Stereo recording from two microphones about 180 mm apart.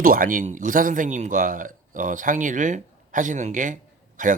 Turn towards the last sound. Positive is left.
turn(degrees=-45)  # may be behind; listen again after turning